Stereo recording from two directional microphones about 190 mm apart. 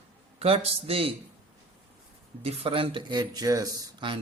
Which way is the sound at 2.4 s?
30° right (ahead or behind).